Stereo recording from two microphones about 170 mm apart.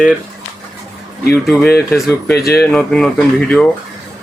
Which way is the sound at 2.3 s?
70° left (ahead or behind).